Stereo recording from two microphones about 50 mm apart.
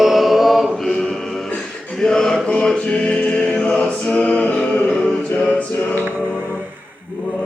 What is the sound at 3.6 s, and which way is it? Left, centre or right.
Music, left.